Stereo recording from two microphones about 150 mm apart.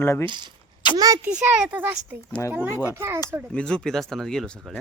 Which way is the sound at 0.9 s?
25° right (ahead or behind).